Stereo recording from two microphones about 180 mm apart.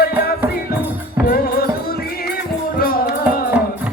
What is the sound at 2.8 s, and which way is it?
Music, 55° left (ahead or behind).